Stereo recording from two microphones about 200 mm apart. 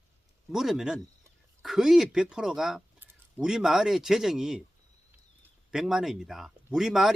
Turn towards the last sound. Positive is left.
turn(degrees=0)  # may be behind; listen again after turning